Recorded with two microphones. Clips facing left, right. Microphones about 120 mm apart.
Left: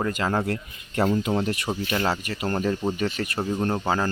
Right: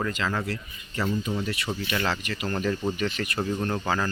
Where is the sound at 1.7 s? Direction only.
30° left (ahead or behind).